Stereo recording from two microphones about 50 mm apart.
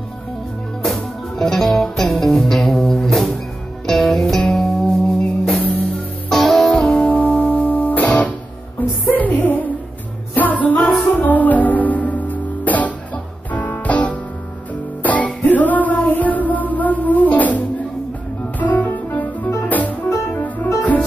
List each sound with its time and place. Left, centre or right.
0.8 s music: centre
4.8 s music: centre
6.3 s music: centre
7.1 s guitar: left
9.1 s music: left
10.8 s music: centre
11.1 s music: left